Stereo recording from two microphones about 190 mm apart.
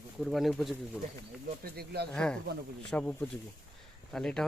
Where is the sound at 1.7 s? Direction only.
55° right (ahead or behind).